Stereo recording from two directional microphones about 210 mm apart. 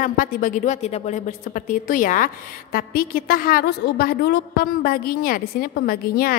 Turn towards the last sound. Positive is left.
turn(degrees=45)  # may be behind; listen again after turning